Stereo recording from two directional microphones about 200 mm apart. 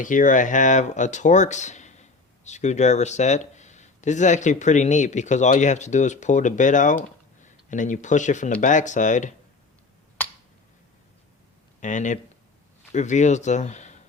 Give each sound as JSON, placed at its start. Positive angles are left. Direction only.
{"t": 0.0, "sound": "speech", "side_deg": 40}
{"t": 11.8, "sound": "speech", "side_deg": 40}